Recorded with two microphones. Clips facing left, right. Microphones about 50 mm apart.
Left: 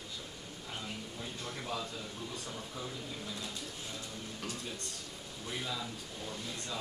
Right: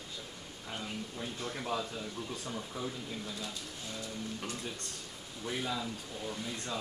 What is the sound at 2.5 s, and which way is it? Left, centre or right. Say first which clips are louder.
Speech: right 3 dB; centre.